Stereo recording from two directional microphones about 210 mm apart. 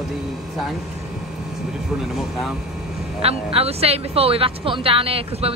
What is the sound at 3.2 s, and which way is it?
Speech, 30° right (ahead or behind).